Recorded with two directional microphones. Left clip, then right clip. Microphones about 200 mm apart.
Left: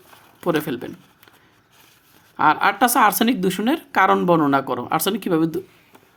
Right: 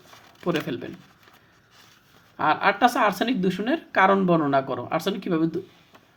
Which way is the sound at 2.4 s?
50° left (ahead or behind).